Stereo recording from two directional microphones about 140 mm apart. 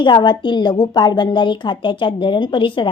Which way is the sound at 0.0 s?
35° left (ahead or behind).